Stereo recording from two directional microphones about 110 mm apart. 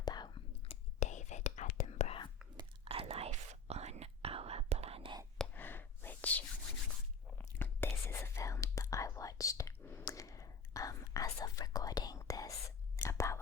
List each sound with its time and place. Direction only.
0.0 s whispering: 40° left (ahead or behind)
0.6 s whispering: 80° left
2.8 s whispering: 60° right (ahead or behind)
5.5 s whispering: 20° left (ahead or behind)